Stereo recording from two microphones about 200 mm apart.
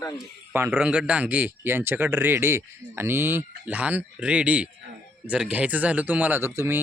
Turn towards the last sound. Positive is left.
turn(degrees=-15)  # may be behind; listen again after turning